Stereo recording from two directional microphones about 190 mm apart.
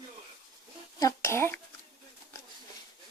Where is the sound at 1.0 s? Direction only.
15° left (ahead or behind).